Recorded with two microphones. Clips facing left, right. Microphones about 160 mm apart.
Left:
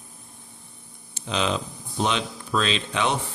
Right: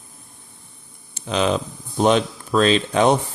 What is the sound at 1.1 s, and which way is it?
Speech, 50° right (ahead or behind).